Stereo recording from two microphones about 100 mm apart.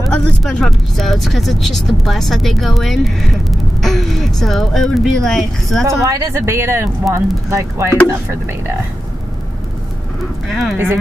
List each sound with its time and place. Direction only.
0.4 s speech: 5° left (ahead or behind)
5.9 s speech: 30° right (ahead or behind)
10.5 s speech: centre (ahead or behind)